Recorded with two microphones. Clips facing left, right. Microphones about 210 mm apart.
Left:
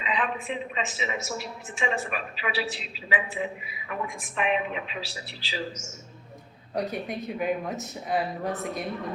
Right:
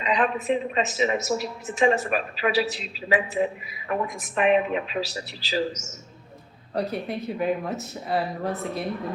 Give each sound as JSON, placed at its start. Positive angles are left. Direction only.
{"t": 0.0, "sound": "a woman's voice", "side_deg": -45}
{"t": 6.7, "sound": "speech", "side_deg": 0}